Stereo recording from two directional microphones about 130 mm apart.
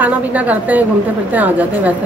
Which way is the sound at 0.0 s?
10° right (ahead or behind).